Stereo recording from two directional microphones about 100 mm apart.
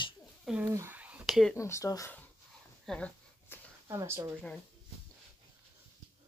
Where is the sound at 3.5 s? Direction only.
20° left (ahead or behind).